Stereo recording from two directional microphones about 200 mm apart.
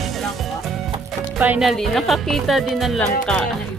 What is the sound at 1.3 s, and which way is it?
Speech, 5° right (ahead or behind).